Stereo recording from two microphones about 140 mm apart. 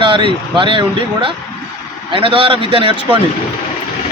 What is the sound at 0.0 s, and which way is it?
Speech, 35° right (ahead or behind).